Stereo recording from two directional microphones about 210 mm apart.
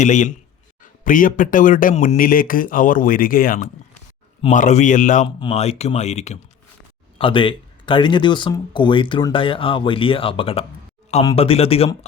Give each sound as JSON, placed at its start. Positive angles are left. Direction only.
{"t": 0.0, "sound": "speech", "side_deg": 35}